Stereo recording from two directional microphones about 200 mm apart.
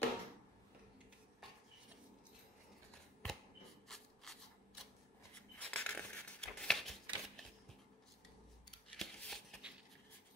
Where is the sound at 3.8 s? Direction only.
Centre (ahead or behind).